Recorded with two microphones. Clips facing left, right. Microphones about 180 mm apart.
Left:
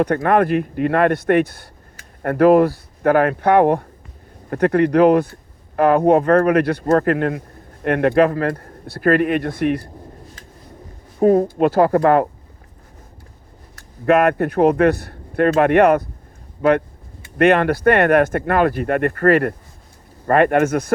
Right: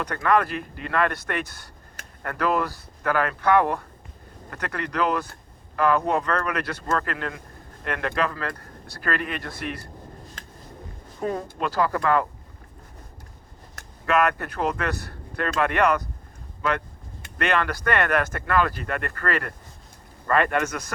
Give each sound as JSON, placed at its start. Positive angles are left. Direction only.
{"t": 0.0, "sound": "speech", "side_deg": 55}
{"t": 11.2, "sound": "speech", "side_deg": 45}
{"t": 14.1, "sound": "speech", "side_deg": 55}